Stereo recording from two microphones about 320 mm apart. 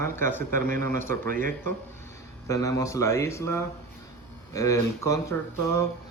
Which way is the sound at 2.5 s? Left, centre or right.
Centre.